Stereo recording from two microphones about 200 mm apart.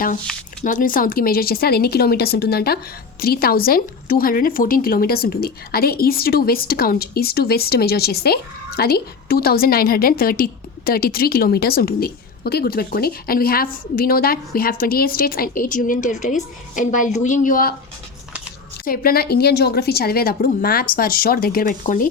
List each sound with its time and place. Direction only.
0.6 s speech: 40° left (ahead or behind)
18.9 s speech: 50° left (ahead or behind)